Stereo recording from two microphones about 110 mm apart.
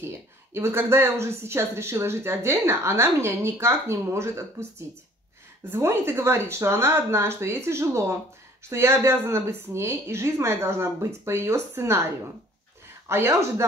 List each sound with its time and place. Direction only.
0.0 s speech: 25° right (ahead or behind)